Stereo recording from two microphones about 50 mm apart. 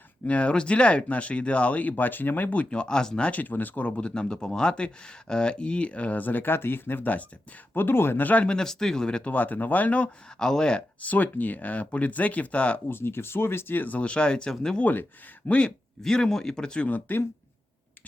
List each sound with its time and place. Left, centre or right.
0.3 s speech: left
3.2 s speech: left
7.7 s speech: left
8.4 s speech: centre
9.3 s speech: left
10.3 s speech: centre
11.0 s speech: left
12.9 s speech: left; by 14.5 s centre
14.8 s speech: left
16.0 s speech: centre
16.8 s speech: left